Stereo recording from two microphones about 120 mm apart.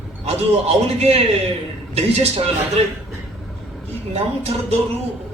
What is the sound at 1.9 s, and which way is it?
Speech, 60° right (ahead or behind).